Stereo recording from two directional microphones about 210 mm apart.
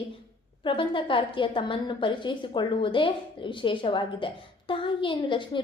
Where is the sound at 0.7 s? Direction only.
25° left (ahead or behind).